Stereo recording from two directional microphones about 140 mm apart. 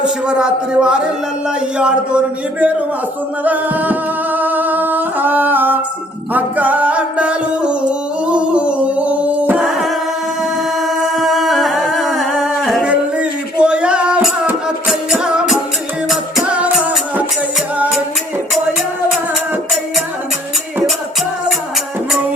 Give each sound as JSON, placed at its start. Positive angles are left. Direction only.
{"t": 0.0, "sound": "music", "side_deg": -5}
{"t": 3.4, "sound": "singing", "side_deg": -10}
{"t": 6.3, "sound": "music", "side_deg": -10}
{"t": 10.8, "sound": "humming", "side_deg": 0}
{"t": 12.9, "sound": "music", "side_deg": -10}